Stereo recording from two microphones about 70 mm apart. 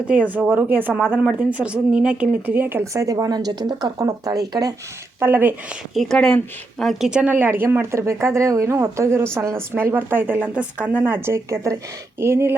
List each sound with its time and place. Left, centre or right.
0.1 s a woman's voice: right
2.8 s speech: right
4.0 s speech: right
5.2 s a woman's voice: right
5.9 s speech: centre
6.1 s speech: centre
7.1 s speech: centre
7.3 s speech: right
9.7 s a woman's voice: right